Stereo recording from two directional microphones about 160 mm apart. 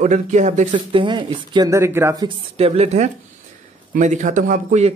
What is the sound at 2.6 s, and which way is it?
A woman's voice, 40° right (ahead or behind).